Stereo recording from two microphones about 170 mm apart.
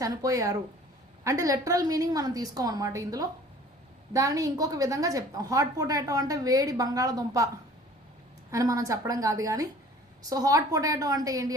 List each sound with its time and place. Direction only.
0.0 s a woman's voice: 20° right (ahead or behind)